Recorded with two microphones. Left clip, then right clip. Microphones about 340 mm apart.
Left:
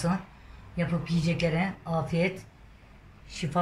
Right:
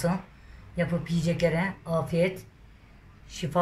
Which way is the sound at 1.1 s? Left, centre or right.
Right.